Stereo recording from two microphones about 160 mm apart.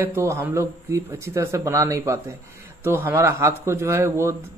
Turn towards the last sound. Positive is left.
turn(degrees=-15)  # may be behind; listen again after turning